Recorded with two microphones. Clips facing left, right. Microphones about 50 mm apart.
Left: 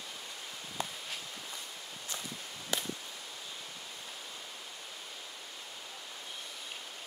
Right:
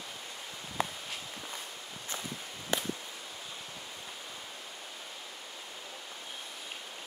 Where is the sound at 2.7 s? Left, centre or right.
Right.